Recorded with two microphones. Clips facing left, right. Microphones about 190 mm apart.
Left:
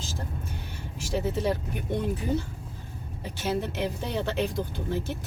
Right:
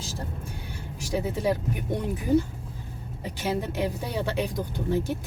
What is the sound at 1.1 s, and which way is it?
Speech, 10° right (ahead or behind).